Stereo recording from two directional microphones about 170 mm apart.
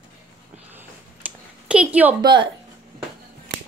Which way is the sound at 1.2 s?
10° right (ahead or behind).